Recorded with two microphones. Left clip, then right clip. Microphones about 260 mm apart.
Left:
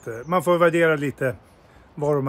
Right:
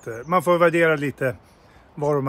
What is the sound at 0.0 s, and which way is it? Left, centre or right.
Speech, centre.